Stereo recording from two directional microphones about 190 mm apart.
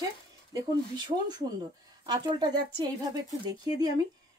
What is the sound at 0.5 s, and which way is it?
Speech, 20° right (ahead or behind).